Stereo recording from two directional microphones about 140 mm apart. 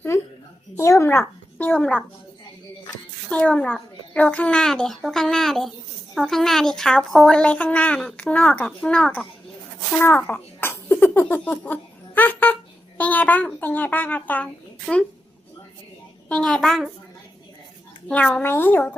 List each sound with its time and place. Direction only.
0.1 s a sound: 20° left (ahead or behind)
0.8 s a child's voice: 20° left (ahead or behind)
1.7 s speech: 10° left (ahead or behind)
3.2 s a child's voice: 10° left (ahead or behind)
10.0 s a sound: 15° left (ahead or behind)
13.0 s speech: 10° left (ahead or behind)
16.3 s a child's voice: 5° left (ahead or behind)
18.1 s speech: 10° left (ahead or behind)